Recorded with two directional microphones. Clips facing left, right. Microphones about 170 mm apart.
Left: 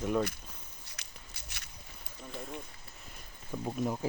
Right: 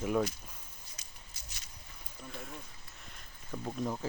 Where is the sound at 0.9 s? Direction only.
70° left (ahead or behind).